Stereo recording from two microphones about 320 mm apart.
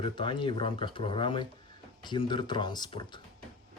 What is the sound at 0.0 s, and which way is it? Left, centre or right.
Speech, centre.